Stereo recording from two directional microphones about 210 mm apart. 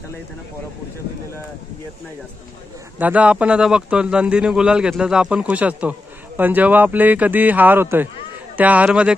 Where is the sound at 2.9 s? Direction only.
5° right (ahead or behind).